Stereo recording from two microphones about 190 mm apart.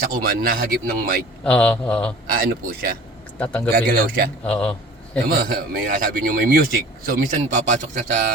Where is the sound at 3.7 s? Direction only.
50° right (ahead or behind).